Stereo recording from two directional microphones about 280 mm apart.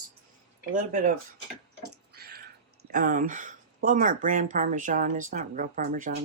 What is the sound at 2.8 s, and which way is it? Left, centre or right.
Speech, right.